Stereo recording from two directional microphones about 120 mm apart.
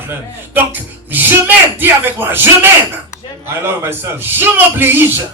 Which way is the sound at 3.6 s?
20° right (ahead or behind).